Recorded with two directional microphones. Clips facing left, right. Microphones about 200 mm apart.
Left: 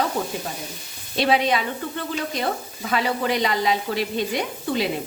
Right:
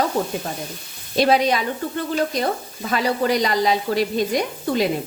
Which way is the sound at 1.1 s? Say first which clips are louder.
Right 3 dB; 40° right (ahead or behind).